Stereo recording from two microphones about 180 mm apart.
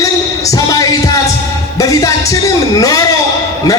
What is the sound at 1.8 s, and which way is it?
A man's voice, 20° left (ahead or behind).